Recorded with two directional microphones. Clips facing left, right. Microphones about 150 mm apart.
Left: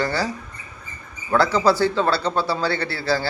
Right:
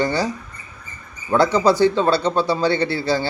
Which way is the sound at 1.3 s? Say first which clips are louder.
Right 2 dB; 20° right (ahead or behind).